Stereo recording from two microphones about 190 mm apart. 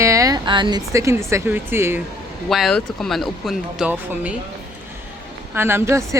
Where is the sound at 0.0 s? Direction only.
15° right (ahead or behind).